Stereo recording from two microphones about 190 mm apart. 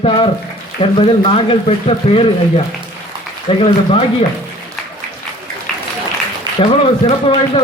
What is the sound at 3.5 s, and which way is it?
Speech, 25° left (ahead or behind).